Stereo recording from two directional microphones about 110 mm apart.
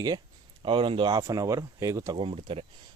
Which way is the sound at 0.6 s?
50° right (ahead or behind).